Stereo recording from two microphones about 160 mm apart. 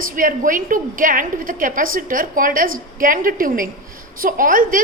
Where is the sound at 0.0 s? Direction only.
60° right (ahead or behind).